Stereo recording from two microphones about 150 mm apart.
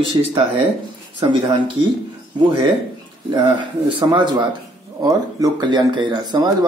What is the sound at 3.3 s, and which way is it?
Speech, 30° right (ahead or behind).